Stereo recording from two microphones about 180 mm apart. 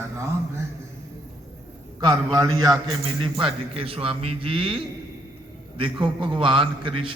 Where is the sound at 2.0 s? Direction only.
20° right (ahead or behind).